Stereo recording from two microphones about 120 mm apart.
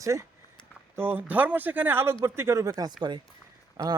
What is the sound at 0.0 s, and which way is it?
Speech, 25° right (ahead or behind).